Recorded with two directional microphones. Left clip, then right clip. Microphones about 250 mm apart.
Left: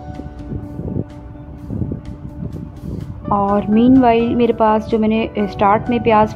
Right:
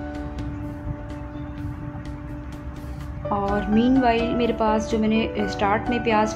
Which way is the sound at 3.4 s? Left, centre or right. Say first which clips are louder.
Left 7 dB; left.